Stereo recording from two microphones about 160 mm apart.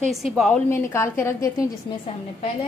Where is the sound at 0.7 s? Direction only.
15° left (ahead or behind).